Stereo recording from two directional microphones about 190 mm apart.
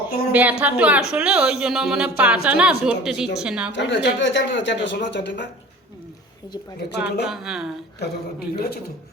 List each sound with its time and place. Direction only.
0.1 s a woman's voice: 55° left (ahead or behind)
0.6 s a woman's voice: 5° right (ahead or behind)
3.7 s speech: 70° left (ahead or behind)
6.7 s a woman's voice: 60° left (ahead or behind)
7.3 s a woman's voice: centre (ahead or behind)
8.5 s a man's voice: 55° left (ahead or behind)